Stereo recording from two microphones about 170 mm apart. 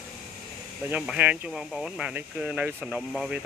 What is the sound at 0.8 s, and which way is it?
Speech, 10° right (ahead or behind).